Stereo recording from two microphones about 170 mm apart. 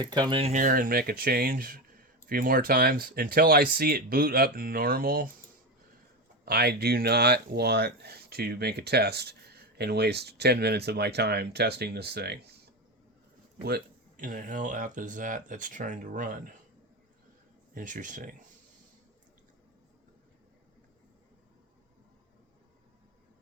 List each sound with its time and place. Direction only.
0.0 s speech: 25° right (ahead or behind)
0.5 s speech: 55° right (ahead or behind)
6.4 s speech: 70° right (ahead or behind)
13.7 s speech: 60° right (ahead or behind)
17.7 s speech: 50° right (ahead or behind)